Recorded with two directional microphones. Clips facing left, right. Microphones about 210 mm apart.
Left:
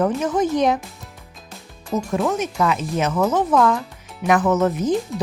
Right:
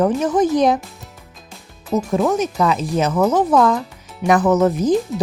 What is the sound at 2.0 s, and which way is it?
Speech, 35° right (ahead or behind).